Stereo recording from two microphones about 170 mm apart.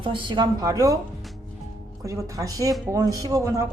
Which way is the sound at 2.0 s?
20° right (ahead or behind).